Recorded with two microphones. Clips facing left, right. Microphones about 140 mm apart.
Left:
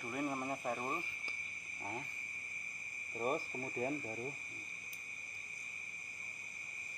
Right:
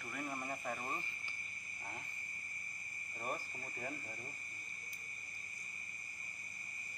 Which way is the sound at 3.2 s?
25° left (ahead or behind).